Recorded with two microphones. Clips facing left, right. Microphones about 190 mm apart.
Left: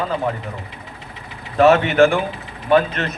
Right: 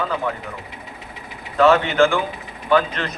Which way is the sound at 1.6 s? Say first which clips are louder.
Left 2 dB; 20° left (ahead or behind).